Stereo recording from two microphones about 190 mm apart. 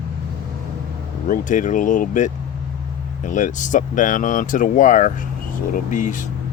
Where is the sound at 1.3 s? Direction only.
40° left (ahead or behind).